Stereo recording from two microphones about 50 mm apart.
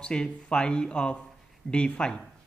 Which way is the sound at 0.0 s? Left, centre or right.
Centre.